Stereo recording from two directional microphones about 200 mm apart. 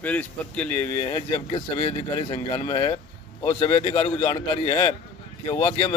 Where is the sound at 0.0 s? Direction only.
5° left (ahead or behind).